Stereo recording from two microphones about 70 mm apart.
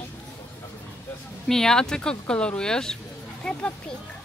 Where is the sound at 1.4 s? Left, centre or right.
Centre.